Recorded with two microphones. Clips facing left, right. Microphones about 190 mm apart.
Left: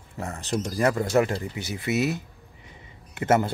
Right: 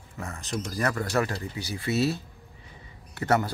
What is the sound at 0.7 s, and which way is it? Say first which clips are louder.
Speech: left 5 dB; 25° left (ahead or behind).